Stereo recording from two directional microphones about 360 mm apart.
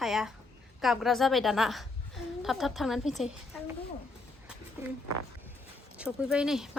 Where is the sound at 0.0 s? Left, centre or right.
Centre.